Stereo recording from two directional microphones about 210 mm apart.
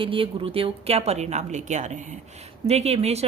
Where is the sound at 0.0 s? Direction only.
25° right (ahead or behind).